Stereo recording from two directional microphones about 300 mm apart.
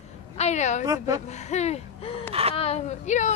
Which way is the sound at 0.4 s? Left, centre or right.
Left.